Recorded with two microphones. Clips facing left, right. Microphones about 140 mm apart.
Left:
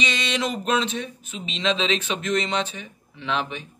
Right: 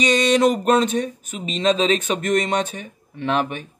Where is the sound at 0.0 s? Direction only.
45° right (ahead or behind).